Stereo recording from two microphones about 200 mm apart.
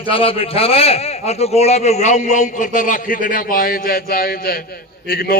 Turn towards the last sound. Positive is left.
turn(degrees=50)  # may be behind; listen again after turning